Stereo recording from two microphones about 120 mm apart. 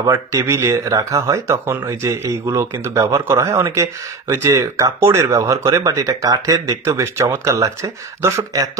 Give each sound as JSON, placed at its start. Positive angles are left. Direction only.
{"t": 0.0, "sound": "speech", "side_deg": -25}